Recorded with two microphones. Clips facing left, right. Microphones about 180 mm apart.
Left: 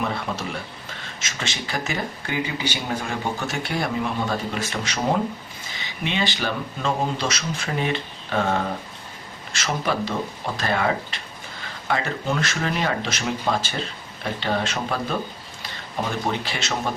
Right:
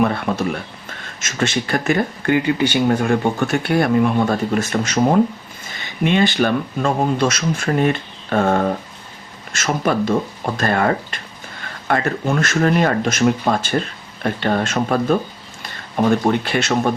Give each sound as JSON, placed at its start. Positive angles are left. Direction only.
{"t": 0.0, "sound": "speech", "side_deg": -55}